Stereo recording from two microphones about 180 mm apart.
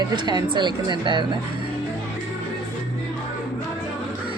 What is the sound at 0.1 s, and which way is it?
Speech, 25° right (ahead or behind).